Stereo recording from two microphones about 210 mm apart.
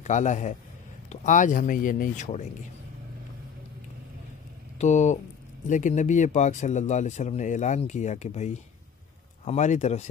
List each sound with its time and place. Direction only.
0.0 s speech: 35° left (ahead or behind)
4.7 s speech: 35° left (ahead or behind)